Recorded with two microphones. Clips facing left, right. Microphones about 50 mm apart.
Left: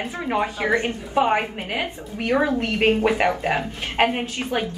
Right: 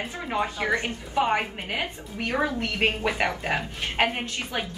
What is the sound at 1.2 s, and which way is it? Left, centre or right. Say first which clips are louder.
A woman's voice: left 3 dB; centre.